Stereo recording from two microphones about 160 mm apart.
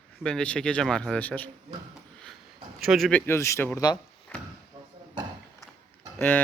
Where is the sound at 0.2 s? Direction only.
5° left (ahead or behind).